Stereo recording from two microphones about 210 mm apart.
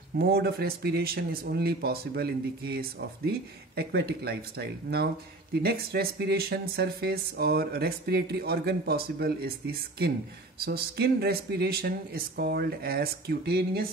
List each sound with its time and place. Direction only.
0.2 s speech: 50° right (ahead or behind)